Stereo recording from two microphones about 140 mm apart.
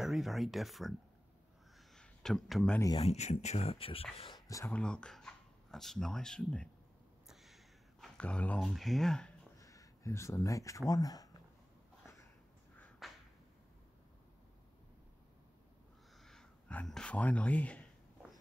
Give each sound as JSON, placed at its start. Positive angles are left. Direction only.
{"t": 0.0, "sound": "speech", "side_deg": 0}
{"t": 2.0, "sound": "a sound", "side_deg": 5}
{"t": 3.0, "sound": "speech", "side_deg": 50}
{"t": 4.2, "sound": "speech", "side_deg": 30}
{"t": 4.7, "sound": "speech", "side_deg": 5}
{"t": 7.2, "sound": "a sound", "side_deg": 0}
{"t": 9.6, "sound": "speech", "side_deg": 25}
{"t": 13.0, "sound": "a sound", "side_deg": 0}
{"t": 16.2, "sound": "speech", "side_deg": 5}